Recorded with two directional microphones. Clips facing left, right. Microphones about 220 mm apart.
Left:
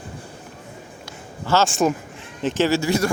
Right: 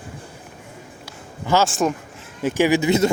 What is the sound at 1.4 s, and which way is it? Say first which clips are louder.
Speech: even; 15° right (ahead or behind).